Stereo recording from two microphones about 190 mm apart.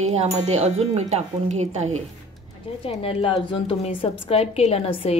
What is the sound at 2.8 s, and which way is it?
A woman's voice, 30° left (ahead or behind).